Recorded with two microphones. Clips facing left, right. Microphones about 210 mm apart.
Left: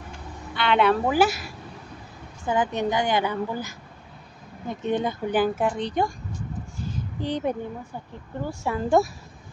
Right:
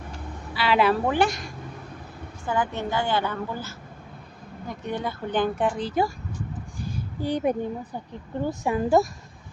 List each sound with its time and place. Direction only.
0.6 s a woman's voice: 5° right (ahead or behind)
2.4 s a woman's voice: 20° left (ahead or behind)
5.3 s a woman's voice: 5° left (ahead or behind)
6.8 s a sound: 10° right (ahead or behind)
8.5 s speech: 15° right (ahead or behind)